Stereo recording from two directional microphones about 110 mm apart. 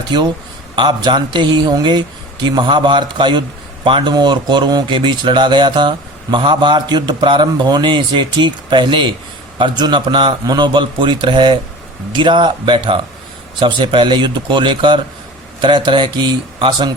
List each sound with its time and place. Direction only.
0.8 s a man's voice: 45° right (ahead or behind)